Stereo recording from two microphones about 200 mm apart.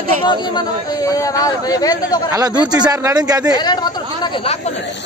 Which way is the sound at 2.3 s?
20° right (ahead or behind).